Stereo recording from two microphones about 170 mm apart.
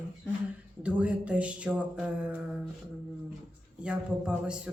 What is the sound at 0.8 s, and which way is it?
A man's voice, 5° right (ahead or behind).